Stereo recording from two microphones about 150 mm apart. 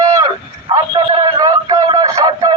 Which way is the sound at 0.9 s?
30° right (ahead or behind).